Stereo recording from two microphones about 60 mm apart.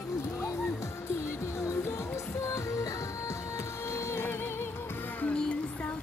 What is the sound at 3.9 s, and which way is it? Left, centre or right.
Music, left.